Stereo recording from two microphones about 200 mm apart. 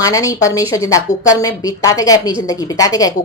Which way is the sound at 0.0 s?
15° left (ahead or behind).